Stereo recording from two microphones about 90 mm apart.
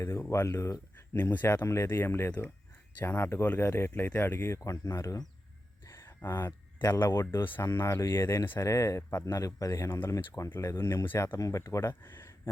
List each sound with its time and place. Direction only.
0.0 s speech: 35° left (ahead or behind)
1.1 s speech: 20° left (ahead or behind)
11.3 s speech: 35° left (ahead or behind)